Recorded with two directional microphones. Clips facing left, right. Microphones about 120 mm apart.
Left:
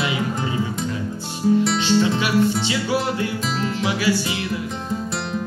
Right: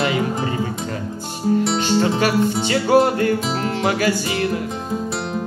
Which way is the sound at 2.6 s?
50° right (ahead or behind).